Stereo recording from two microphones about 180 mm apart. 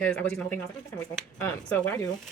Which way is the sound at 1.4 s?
10° left (ahead or behind).